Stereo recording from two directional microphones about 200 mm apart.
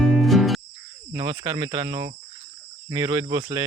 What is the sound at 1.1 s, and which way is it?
Speech, 25° right (ahead or behind).